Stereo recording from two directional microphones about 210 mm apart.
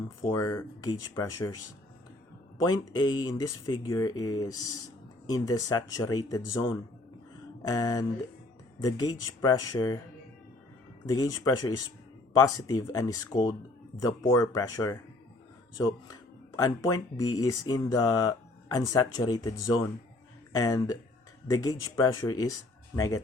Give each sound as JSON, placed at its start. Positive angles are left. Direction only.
{"t": 0.2, "sound": "speech", "side_deg": 15}
{"t": 2.6, "sound": "speech", "side_deg": 20}
{"t": 11.1, "sound": "speech", "side_deg": 15}
{"t": 16.6, "sound": "speech", "side_deg": 15}